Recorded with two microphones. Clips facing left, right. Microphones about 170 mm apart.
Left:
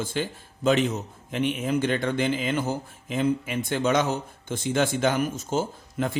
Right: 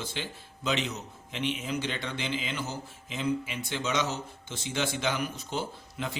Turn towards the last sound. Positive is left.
turn(degrees=50)  # may be behind; listen again after turning